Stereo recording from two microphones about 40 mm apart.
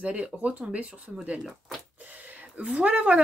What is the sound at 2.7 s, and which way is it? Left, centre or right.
Speech, right.